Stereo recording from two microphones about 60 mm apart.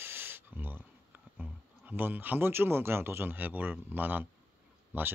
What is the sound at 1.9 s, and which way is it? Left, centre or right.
Speech, right.